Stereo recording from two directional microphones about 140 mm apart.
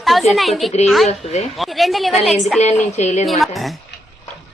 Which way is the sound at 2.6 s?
55° left (ahead or behind).